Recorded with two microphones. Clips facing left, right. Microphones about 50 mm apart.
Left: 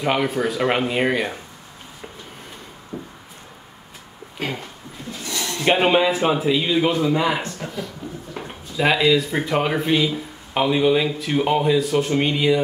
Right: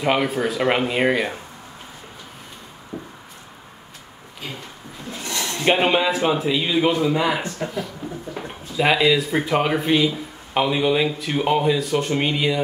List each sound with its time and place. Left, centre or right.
0.0 s speech: centre
2.9 s a sound: right
4.4 s speech: left
5.6 s speech: centre